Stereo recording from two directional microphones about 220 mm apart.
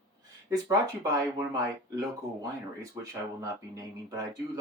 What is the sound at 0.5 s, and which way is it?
Speech, 15° right (ahead or behind).